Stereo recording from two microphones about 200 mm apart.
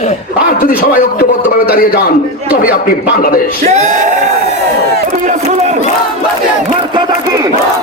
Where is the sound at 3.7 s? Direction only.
35° right (ahead or behind).